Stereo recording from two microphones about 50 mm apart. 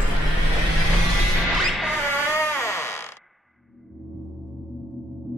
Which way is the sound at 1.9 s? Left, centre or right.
Left.